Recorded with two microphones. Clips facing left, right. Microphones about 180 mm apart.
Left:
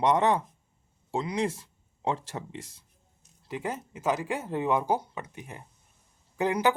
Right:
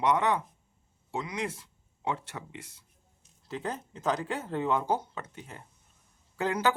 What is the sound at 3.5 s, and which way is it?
Speech, 10° left (ahead or behind).